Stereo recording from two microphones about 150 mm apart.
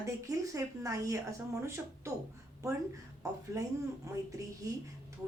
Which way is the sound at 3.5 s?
20° right (ahead or behind).